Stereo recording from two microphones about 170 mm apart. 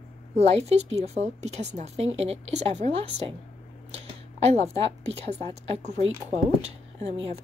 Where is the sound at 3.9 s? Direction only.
40° right (ahead or behind).